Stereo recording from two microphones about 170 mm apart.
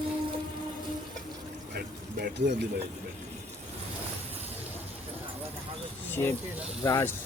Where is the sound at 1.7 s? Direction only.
65° right (ahead or behind).